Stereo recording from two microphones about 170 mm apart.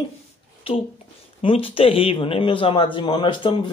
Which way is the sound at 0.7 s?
35° left (ahead or behind).